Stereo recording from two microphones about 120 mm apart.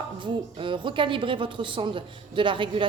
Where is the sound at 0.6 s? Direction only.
45° right (ahead or behind).